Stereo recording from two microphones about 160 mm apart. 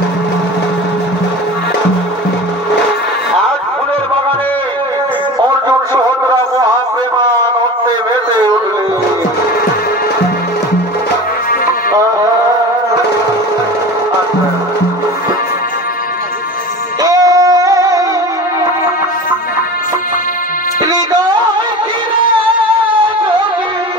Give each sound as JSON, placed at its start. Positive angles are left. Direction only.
{"t": 8.1, "sound": "a sound", "side_deg": -30}
{"t": 11.9, "sound": "music", "side_deg": -20}
{"t": 17.0, "sound": "music", "side_deg": -20}
{"t": 20.8, "sound": "music", "side_deg": -25}